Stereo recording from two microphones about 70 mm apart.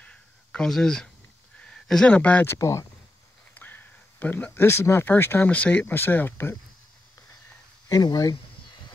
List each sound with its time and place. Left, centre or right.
0.0 s a sound: centre
0.7 s speech: centre
2.0 s speech: left
2.4 s speech: left
3.5 s a sound: left
5.0 s speech: left
5.5 s speech: left
7.9 s speech: left